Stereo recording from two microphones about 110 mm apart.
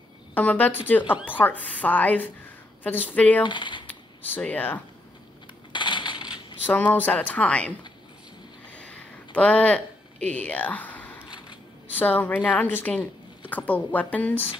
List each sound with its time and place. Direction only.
0.3 s speech: 15° left (ahead or behind)
3.4 s speech: 45° left (ahead or behind)
3.8 s a sound: 15° left (ahead or behind)
5.7 s crushing: 45° left (ahead or behind)
6.6 s speech: 15° left (ahead or behind)
8.7 s a sound: 10° left (ahead or behind)
11.9 s speech: 15° left (ahead or behind)